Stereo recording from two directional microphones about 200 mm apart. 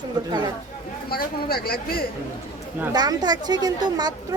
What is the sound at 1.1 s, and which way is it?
Speech, 50° left (ahead or behind).